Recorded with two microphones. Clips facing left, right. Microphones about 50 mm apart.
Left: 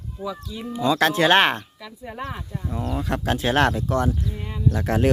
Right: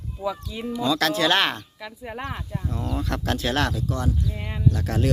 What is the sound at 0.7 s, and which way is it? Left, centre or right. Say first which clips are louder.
Speech: left 3 dB; left.